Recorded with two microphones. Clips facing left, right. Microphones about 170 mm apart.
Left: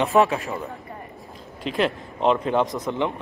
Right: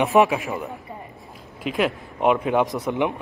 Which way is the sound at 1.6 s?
5° right (ahead or behind).